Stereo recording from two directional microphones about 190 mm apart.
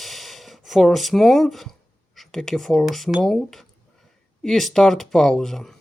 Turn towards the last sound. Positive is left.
turn(degrees=0)  # may be behind; listen again after turning